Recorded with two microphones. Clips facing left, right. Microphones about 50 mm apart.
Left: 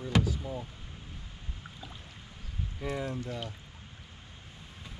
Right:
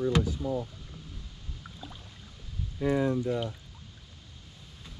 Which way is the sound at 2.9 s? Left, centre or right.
Right.